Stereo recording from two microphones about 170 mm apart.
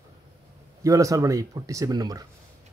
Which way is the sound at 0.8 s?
20° right (ahead or behind).